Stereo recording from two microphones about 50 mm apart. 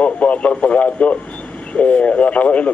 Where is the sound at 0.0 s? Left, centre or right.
Left.